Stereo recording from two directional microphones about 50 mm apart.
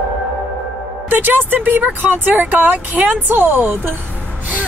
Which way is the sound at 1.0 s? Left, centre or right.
Right.